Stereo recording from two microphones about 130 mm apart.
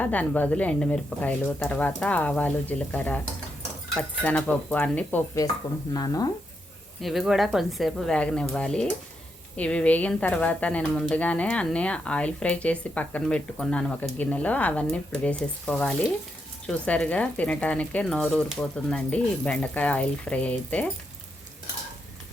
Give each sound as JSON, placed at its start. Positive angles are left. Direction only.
{"t": 0.0, "sound": "speech", "side_deg": 10}
{"t": 5.9, "sound": "speech", "side_deg": 30}
{"t": 7.0, "sound": "speech", "side_deg": 0}